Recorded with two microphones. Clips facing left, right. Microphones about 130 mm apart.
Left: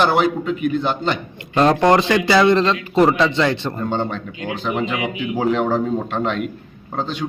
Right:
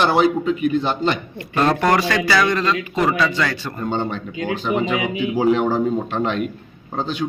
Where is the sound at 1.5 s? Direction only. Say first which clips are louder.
Left 3 dB; 20° left (ahead or behind).